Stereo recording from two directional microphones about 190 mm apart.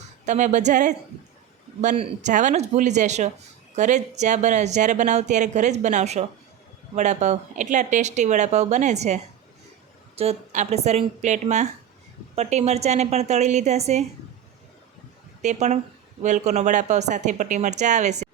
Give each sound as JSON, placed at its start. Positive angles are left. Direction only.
{"t": 0.3, "sound": "a woman's voice", "side_deg": -40}
{"t": 15.4, "sound": "a woman's voice", "side_deg": -40}